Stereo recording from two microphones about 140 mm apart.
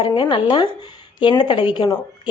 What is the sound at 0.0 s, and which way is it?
A woman's voice, 35° left (ahead or behind).